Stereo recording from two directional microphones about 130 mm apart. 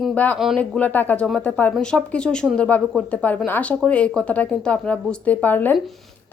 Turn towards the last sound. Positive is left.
turn(degrees=15)  # may be behind; listen again after turning